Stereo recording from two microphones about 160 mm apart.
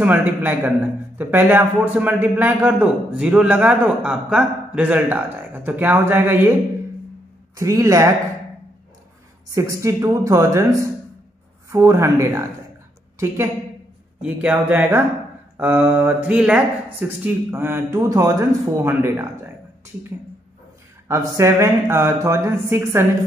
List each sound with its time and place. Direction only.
0.0 s a man's voice: 10° right (ahead or behind)
7.5 s speech: 20° right (ahead or behind)
9.5 s a man's voice: 20° right (ahead or behind)
14.2 s a man's voice: 10° right (ahead or behind)
21.1 s a man's voice: 15° right (ahead or behind)